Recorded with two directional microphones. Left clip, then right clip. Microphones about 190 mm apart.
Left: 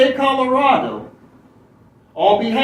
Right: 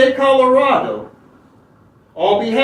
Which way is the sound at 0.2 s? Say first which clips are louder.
Right 4 dB; centre (ahead or behind).